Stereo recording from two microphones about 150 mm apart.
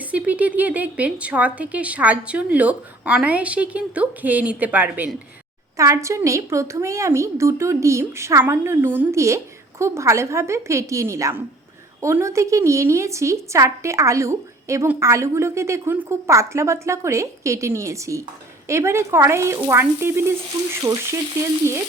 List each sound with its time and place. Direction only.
0.1 s speech: 10° right (ahead or behind)
5.7 s a woman's voice: 20° right (ahead or behind)